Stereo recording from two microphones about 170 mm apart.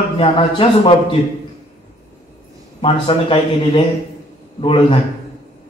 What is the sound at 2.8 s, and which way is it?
A man's voice, 35° left (ahead or behind).